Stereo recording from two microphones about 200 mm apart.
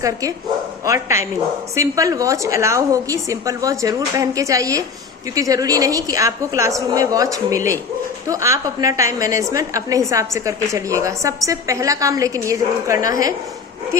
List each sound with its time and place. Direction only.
0.0 s a woman's voice: 15° right (ahead or behind)